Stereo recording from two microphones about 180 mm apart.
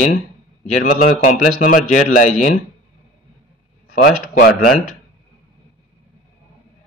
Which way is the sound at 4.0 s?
55° left (ahead or behind).